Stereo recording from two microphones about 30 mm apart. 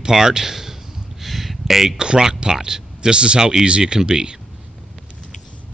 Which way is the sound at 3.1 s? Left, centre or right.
Right.